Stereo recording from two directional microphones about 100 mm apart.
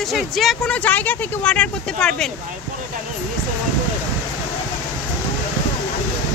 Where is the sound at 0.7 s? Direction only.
15° left (ahead or behind).